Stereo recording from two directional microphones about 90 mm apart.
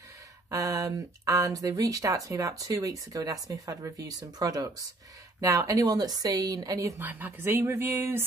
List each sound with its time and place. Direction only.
0.5 s a woman's voice: 40° right (ahead or behind)
7.0 s speech: 20° right (ahead or behind)